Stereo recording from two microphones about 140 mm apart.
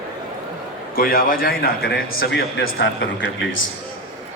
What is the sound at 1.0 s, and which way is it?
A man's voice, 90° left.